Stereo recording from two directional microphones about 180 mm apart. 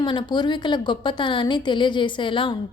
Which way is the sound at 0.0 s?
25° left (ahead or behind).